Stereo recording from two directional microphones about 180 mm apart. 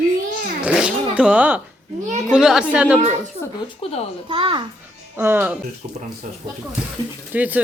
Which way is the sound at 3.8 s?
35° left (ahead or behind).